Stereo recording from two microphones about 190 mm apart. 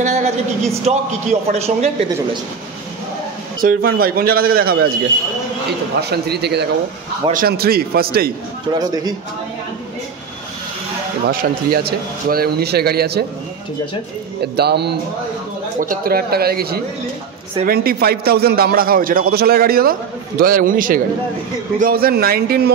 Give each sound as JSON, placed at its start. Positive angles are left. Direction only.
{"t": 0.0, "sound": "a sound", "side_deg": -35}
{"t": 0.8, "sound": "a man's voice", "side_deg": -35}
{"t": 3.6, "sound": "a man's voice", "side_deg": -50}
{"t": 5.9, "sound": "a man's voice", "side_deg": -60}
{"t": 8.7, "sound": "a man's voice", "side_deg": -20}
{"t": 11.2, "sound": "a man's voice", "side_deg": -55}
{"t": 14.4, "sound": "a man's voice", "side_deg": -60}
{"t": 15.8, "sound": "a man's voice", "side_deg": -50}